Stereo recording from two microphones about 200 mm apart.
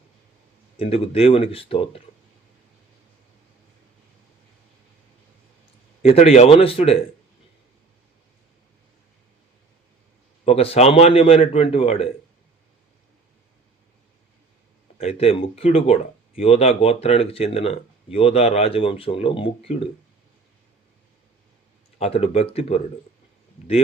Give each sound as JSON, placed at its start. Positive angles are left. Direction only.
{"t": 0.8, "sound": "speech", "side_deg": 30}
{"t": 6.0, "sound": "speech", "side_deg": 30}
{"t": 10.4, "sound": "speech", "side_deg": 30}
{"t": 14.9, "sound": "speech", "side_deg": 30}
{"t": 21.9, "sound": "speech", "side_deg": 30}